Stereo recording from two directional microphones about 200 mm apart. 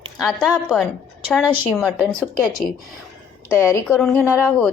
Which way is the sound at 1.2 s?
5° right (ahead or behind).